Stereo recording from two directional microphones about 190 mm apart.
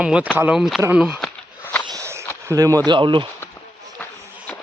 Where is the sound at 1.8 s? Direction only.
15° right (ahead or behind).